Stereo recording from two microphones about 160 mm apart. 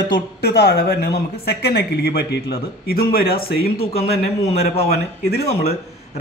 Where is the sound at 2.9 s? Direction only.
70° left (ahead or behind).